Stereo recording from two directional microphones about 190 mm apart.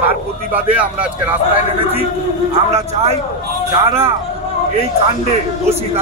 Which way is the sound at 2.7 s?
35° right (ahead or behind).